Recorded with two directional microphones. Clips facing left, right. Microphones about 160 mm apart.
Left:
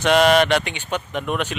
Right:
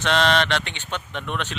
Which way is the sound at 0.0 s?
10° left (ahead or behind).